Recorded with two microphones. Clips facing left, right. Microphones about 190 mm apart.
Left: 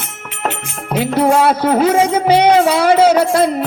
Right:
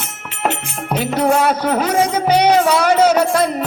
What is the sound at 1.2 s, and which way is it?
Music, 30° left (ahead or behind).